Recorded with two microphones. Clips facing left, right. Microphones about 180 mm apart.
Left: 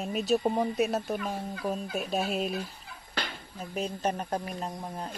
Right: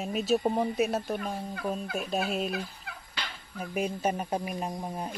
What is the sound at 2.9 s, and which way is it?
Fowl, 65° right (ahead or behind).